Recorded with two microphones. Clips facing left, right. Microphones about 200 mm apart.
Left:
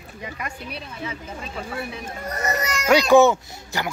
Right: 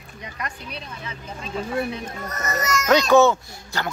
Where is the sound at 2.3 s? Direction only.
35° left (ahead or behind).